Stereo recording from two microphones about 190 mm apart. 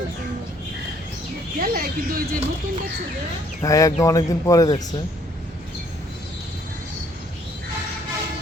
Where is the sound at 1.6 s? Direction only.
50° right (ahead or behind).